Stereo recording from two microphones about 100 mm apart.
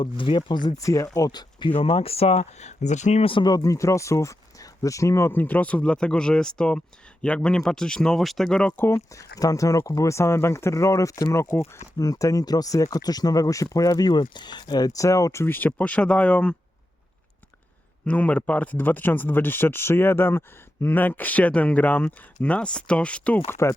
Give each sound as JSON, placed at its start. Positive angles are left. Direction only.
{"t": 0.0, "sound": "speech", "side_deg": 55}
{"t": 0.8, "sound": "speech", "side_deg": 35}
{"t": 1.7, "sound": "speech", "side_deg": 70}
{"t": 3.2, "sound": "speech", "side_deg": 65}
{"t": 3.4, "sound": "speech", "side_deg": 35}
{"t": 8.7, "sound": "speech", "side_deg": 20}
{"t": 9.1, "sound": "speech", "side_deg": 35}
{"t": 18.0, "sound": "speech", "side_deg": 15}
{"t": 23.5, "sound": "speech", "side_deg": 30}